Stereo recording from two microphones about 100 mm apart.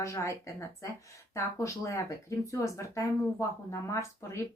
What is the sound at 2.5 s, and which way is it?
Speech, 30° left (ahead or behind).